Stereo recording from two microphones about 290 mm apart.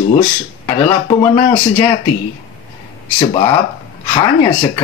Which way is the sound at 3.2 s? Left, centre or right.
Centre.